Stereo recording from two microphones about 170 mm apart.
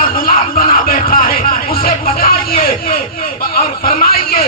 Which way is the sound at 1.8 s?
60° left (ahead or behind).